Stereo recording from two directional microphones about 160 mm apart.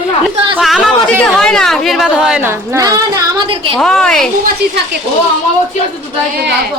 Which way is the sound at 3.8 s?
5° left (ahead or behind).